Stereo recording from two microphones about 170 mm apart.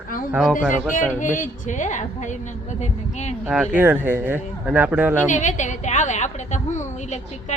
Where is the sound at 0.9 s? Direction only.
50° left (ahead or behind).